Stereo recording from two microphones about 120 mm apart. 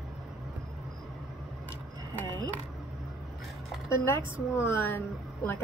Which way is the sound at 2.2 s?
35° right (ahead or behind).